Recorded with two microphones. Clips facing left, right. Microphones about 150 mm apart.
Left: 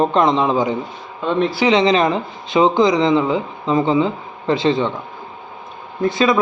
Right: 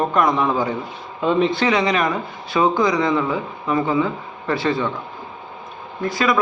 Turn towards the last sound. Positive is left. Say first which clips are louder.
# left 4 dB
turn(degrees=25)  # may be behind; listen again after turning